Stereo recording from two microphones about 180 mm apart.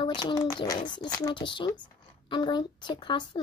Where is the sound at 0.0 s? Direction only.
25° left (ahead or behind).